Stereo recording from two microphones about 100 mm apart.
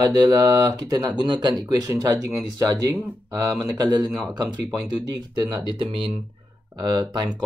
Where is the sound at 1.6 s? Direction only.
35° right (ahead or behind).